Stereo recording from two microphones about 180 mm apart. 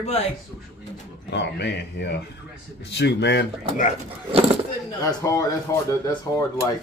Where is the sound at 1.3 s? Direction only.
70° left (ahead or behind).